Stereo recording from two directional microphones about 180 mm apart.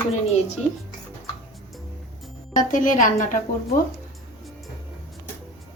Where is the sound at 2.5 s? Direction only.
45° left (ahead or behind).